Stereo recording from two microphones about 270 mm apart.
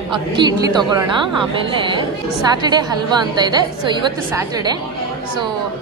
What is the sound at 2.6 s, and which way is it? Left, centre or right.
A woman's voice, centre.